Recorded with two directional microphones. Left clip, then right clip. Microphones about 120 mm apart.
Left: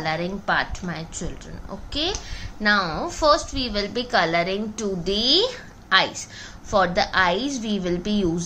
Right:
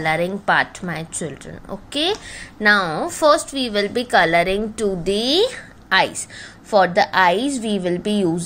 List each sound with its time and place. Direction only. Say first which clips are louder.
0.0 s a woman's voice: right 6 dB; 65° right (ahead or behind); by 8.5 s 45° right (ahead or behind)